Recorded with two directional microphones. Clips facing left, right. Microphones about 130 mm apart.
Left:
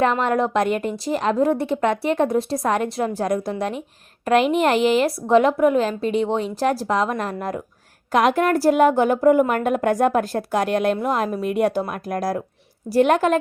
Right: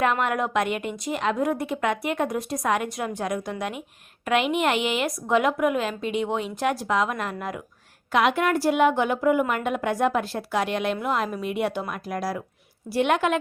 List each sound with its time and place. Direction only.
0.0 s a woman's voice: 30° left (ahead or behind)